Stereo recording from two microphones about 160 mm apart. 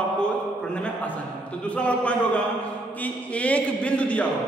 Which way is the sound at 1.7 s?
10° left (ahead or behind).